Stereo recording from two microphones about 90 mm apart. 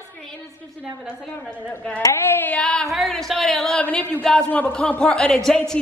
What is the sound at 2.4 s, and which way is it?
Speech, 15° left (ahead or behind).